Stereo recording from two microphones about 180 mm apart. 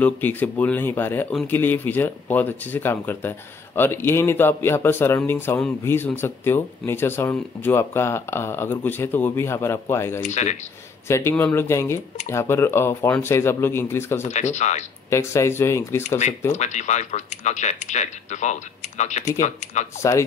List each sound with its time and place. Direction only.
0.0 s speech: 10° left (ahead or behind)
10.2 s speech: 40° left (ahead or behind)
11.1 s speech: 15° left (ahead or behind)
14.2 s speech: 40° left (ahead or behind)
15.0 s speech: 15° left (ahead or behind)
16.5 s speech: 40° left (ahead or behind)
20.0 s speech: 15° left (ahead or behind)